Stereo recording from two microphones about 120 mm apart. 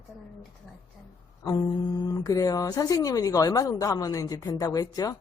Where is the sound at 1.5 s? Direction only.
35° left (ahead or behind).